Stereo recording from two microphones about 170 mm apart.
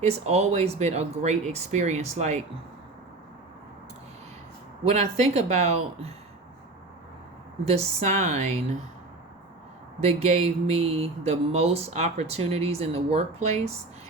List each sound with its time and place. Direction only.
0.0 s speech: 40° right (ahead or behind)
4.9 s speech: 40° right (ahead or behind)
7.6 s speech: 35° right (ahead or behind)
10.0 s speech: 40° right (ahead or behind)